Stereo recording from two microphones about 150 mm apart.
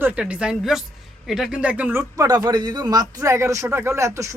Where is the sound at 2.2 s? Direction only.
25° right (ahead or behind).